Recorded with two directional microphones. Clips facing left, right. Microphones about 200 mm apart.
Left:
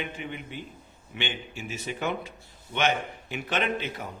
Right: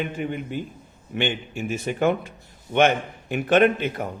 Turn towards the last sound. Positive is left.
turn(degrees=-55)  # may be behind; listen again after turning